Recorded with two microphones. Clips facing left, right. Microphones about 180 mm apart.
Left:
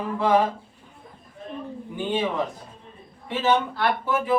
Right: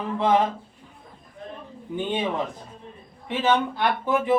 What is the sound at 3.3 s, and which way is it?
Speech, 20° right (ahead or behind).